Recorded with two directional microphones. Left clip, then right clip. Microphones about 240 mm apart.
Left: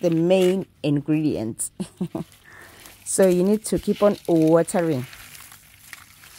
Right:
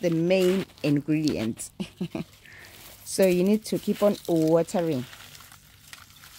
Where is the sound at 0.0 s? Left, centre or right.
Centre.